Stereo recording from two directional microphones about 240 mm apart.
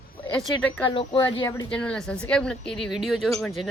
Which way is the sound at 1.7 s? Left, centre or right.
Centre.